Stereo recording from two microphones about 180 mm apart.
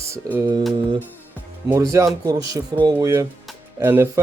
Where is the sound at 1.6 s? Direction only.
15° right (ahead or behind).